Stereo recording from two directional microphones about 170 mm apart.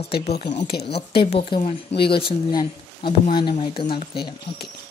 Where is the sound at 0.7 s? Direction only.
70° left (ahead or behind).